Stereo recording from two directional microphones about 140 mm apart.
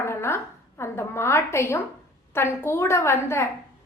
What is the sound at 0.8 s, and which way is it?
A woman's voice, 20° left (ahead or behind).